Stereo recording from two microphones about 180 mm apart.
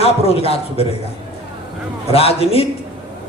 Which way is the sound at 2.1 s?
35° left (ahead or behind).